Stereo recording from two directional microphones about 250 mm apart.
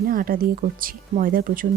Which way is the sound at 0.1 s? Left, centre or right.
Right.